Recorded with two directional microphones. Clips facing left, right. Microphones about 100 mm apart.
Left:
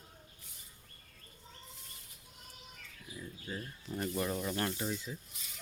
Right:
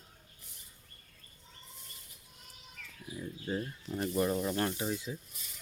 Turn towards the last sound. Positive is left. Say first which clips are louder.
# right 2 dB
turn(degrees=-10)  # may be behind; listen again after turning